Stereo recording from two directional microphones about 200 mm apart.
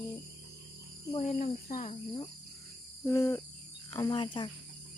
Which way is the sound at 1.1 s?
35° left (ahead or behind).